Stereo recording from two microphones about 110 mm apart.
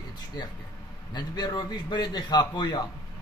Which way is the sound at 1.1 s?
40° left (ahead or behind).